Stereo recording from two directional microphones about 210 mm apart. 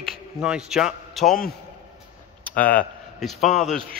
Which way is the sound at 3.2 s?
Centre (ahead or behind).